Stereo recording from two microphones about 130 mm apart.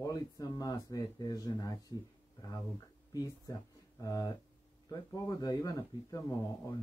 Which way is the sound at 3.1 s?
30° left (ahead or behind).